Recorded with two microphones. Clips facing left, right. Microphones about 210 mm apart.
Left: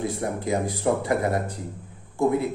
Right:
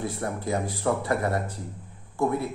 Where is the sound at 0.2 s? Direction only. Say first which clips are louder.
Left 2 dB; 15° left (ahead or behind).